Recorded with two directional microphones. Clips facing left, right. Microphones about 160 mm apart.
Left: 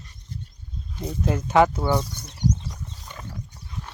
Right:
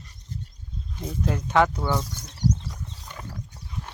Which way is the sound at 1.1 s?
5° left (ahead or behind).